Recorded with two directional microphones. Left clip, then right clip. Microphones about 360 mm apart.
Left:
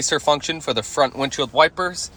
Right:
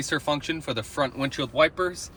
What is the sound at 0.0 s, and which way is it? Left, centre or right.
Speech, centre.